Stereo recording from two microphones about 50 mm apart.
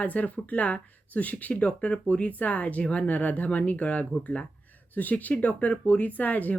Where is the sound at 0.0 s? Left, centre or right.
Left.